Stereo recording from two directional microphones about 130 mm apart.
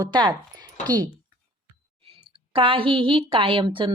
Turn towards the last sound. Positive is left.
turn(degrees=-40)  # may be behind; listen again after turning